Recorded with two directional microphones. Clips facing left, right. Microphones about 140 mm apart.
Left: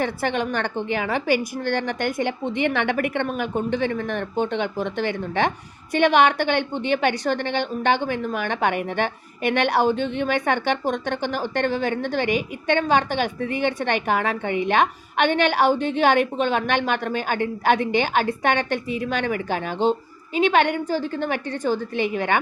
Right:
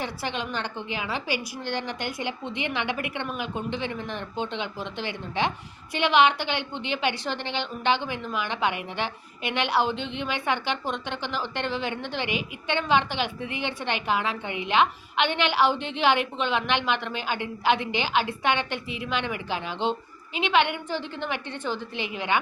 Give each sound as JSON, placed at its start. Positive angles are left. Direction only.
{"t": 0.0, "sound": "a woman's voice", "side_deg": 50}